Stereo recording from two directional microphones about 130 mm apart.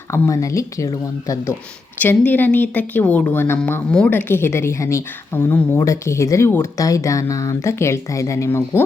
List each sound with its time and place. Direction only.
0.1 s a woman's voice: 25° left (ahead or behind)
2.0 s a woman's voice: 15° left (ahead or behind)